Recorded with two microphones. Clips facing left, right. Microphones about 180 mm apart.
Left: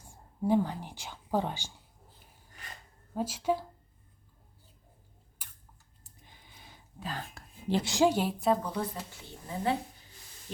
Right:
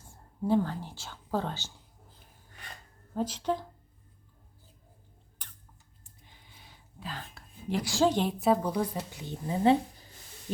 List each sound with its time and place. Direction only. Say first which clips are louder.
0.0 s speech: left 1 dB; 15° left (ahead or behind)
3.2 s speech: even; 10° left (ahead or behind)
5.4 s a sound: right 1 dB; 10° left (ahead or behind)
7.0 s speech: left 2 dB; 45° left (ahead or behind)
7.7 s a woman's voice: even; 25° left (ahead or behind); by 9.7 s 20° right (ahead or behind)